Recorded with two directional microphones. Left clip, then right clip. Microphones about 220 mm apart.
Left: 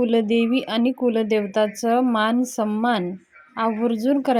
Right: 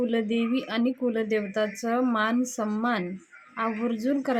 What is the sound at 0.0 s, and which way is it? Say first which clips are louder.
Speech: left 7 dB; 25° left (ahead or behind).